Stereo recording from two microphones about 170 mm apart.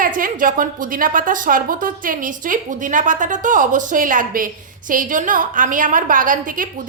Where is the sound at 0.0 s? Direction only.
55° right (ahead or behind).